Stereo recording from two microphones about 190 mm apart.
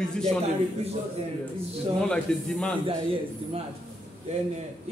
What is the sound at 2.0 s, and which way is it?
Speech, 5° left (ahead or behind).